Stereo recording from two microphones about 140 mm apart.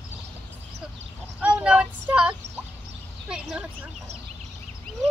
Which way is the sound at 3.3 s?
5° right (ahead or behind).